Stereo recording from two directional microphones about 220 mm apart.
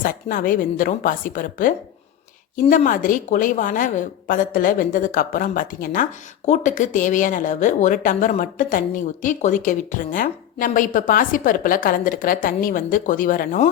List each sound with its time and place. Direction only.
0.0 s a woman's voice: 40° left (ahead or behind)